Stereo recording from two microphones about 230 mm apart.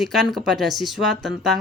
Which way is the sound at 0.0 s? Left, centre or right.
Centre.